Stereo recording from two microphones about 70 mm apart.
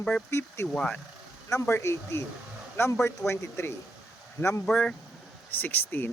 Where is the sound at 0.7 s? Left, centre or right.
Centre.